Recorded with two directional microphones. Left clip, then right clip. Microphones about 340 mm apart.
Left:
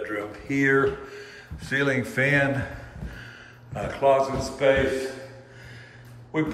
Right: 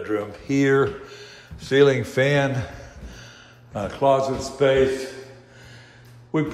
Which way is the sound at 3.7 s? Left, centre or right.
Centre.